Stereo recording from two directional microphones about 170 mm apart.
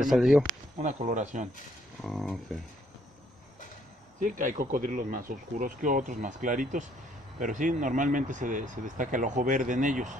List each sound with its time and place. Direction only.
0.0 s speech: 5° right (ahead or behind)
0.7 s speech: 45° right (ahead or behind)
2.0 s speech: centre (ahead or behind)
4.2 s speech: 50° right (ahead or behind)